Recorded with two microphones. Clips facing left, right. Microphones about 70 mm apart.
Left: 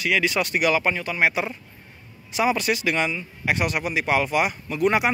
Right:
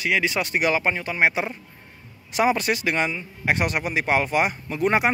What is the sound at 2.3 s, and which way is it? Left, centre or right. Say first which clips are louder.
Speech: right 1 dB; right.